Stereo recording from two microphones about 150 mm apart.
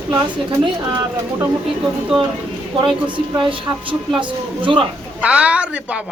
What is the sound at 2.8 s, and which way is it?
Speech, 30° right (ahead or behind).